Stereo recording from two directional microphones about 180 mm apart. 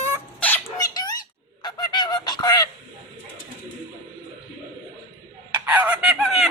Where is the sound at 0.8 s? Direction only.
20° left (ahead or behind).